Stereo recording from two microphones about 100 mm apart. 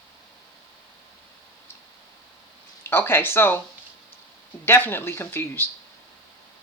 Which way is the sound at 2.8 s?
25° left (ahead or behind).